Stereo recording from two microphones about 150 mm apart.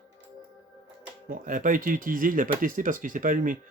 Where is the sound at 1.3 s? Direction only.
60° right (ahead or behind).